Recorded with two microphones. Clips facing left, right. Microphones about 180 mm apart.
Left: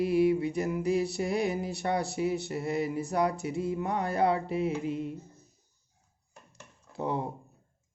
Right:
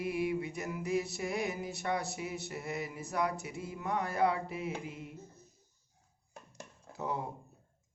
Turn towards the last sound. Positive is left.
turn(degrees=30)  # may be behind; listen again after turning